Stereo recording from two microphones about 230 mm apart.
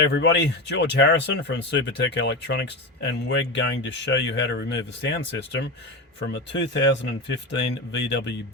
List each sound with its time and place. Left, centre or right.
0.0 s speech: left